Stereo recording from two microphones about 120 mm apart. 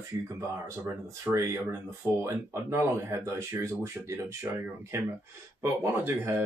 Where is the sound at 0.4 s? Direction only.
25° right (ahead or behind).